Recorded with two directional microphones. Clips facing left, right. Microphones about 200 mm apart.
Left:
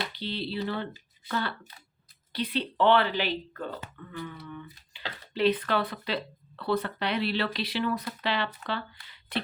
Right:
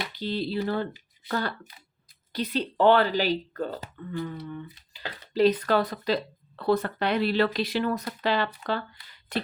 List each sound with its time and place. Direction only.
0.1 s speech: 45° right (ahead or behind)